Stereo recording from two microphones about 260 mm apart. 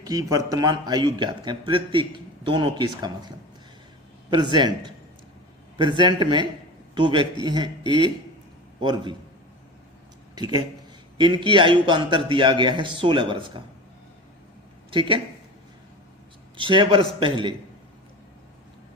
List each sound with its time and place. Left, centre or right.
0.0 s a man's voice: centre
4.3 s a man's voice: centre
6.0 s a man's voice: centre
10.3 s a man's voice: centre
14.8 s a man's voice: centre
16.6 s a man's voice: centre